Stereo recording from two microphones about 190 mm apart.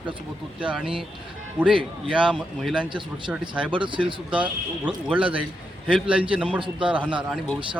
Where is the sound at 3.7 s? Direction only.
25° right (ahead or behind).